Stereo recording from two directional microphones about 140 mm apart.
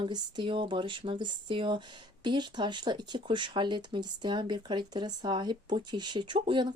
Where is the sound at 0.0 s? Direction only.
35° right (ahead or behind).